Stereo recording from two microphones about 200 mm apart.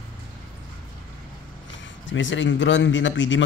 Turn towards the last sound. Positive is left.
turn(degrees=65)  # may be behind; listen again after turning